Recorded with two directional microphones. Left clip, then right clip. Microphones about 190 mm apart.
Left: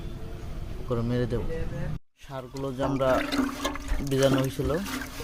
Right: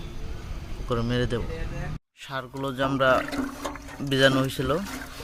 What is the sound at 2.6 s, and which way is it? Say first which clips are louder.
Speech: right 3 dB; centre (ahead or behind).